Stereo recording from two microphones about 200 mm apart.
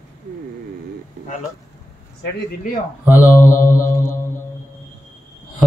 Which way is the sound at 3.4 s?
15° left (ahead or behind).